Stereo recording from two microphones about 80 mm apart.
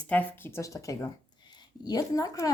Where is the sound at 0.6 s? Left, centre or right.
Left.